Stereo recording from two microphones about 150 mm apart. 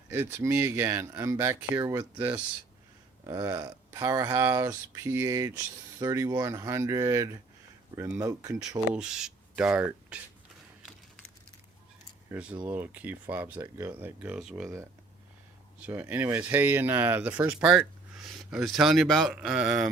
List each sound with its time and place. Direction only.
0.1 s speech: 15° right (ahead or behind)
3.2 s speech: 25° right (ahead or behind)
8.9 s speech: 5° right (ahead or behind)
12.3 s speech: 5° right (ahead or behind)
15.8 s speech: 10° right (ahead or behind)